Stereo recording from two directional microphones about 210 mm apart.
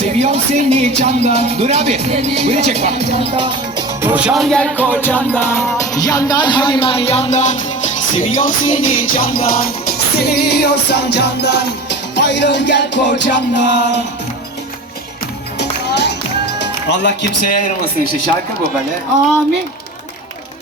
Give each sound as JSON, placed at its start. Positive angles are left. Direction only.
{"t": 0.2, "sound": "speech", "side_deg": -30}
{"t": 4.0, "sound": "music", "side_deg": -5}
{"t": 15.5, "sound": "music", "side_deg": 55}
{"t": 16.6, "sound": "speech", "side_deg": 55}